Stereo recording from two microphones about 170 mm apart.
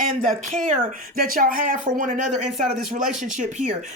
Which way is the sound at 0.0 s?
55° right (ahead or behind).